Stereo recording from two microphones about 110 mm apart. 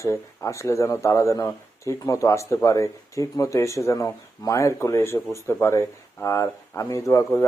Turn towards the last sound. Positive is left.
turn(degrees=30)  # may be behind; listen again after turning